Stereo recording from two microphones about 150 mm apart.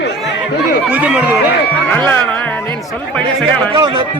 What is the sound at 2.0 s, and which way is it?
Speech, 15° left (ahead or behind).